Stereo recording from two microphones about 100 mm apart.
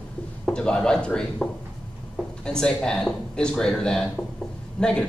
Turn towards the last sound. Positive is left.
turn(degrees=10)  # may be behind; listen again after turning